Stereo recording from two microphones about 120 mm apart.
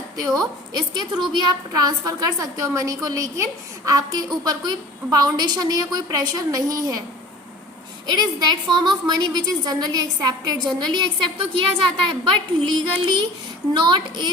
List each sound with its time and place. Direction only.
0.7 s a woman's voice: 35° right (ahead or behind)
8.0 s a woman's voice: 35° right (ahead or behind)